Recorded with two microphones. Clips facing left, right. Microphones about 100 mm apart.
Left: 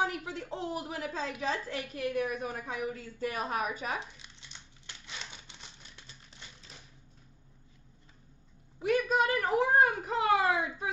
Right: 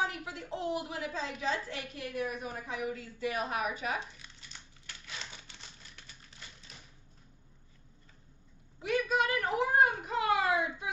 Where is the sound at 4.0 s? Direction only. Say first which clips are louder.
Even; 20° left (ahead or behind).